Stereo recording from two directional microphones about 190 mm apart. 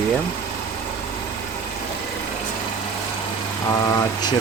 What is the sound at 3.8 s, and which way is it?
Speech, 20° left (ahead or behind).